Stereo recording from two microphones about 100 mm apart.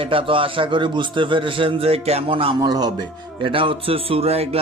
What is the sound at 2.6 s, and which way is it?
Speech, 40° right (ahead or behind).